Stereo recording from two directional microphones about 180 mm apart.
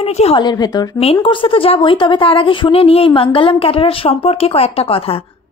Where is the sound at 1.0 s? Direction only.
30° left (ahead or behind).